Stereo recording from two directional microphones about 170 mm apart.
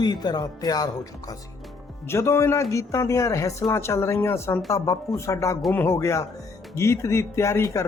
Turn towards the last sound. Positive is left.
turn(degrees=20)  # may be behind; listen again after turning